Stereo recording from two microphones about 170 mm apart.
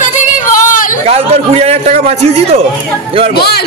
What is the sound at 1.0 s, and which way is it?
A man's voice, 40° right (ahead or behind).